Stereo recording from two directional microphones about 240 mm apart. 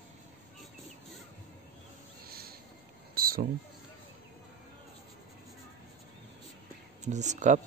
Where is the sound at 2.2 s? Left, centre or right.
Right.